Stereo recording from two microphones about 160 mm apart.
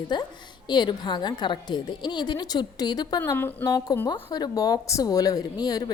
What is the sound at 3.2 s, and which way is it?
A woman's voice, 10° left (ahead or behind).